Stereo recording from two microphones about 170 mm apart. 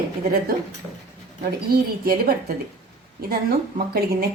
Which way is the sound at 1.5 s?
60° right (ahead or behind).